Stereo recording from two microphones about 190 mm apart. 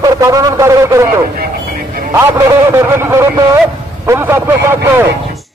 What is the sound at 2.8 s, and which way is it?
Speech, 15° right (ahead or behind).